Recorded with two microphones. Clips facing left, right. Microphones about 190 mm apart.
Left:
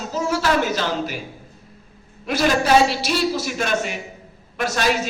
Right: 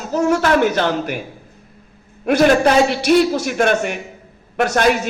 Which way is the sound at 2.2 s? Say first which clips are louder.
Right 7 dB; 55° right (ahead or behind).